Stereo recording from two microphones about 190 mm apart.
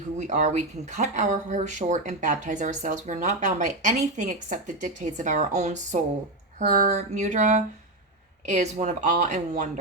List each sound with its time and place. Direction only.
0.2 s speech: 40° right (ahead or behind)